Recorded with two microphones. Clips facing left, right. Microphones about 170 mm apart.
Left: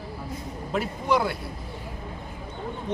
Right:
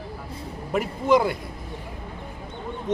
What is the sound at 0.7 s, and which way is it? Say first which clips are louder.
Speech: right 4 dB; 15° right (ahead or behind).